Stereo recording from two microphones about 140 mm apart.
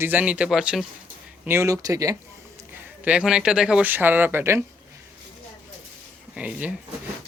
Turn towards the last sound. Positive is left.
turn(degrees=-10)  # may be behind; listen again after turning